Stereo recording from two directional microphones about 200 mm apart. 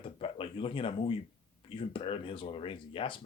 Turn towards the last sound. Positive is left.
turn(degrees=25)  # may be behind; listen again after turning